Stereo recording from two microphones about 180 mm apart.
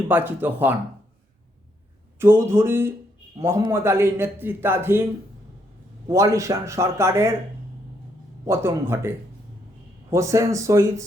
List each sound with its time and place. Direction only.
0.1 s a man's voice: 10° right (ahead or behind)
2.1 s a man's voice: 10° right (ahead or behind)
6.1 s a man's voice: 15° right (ahead or behind)
8.4 s a man's voice: 15° right (ahead or behind)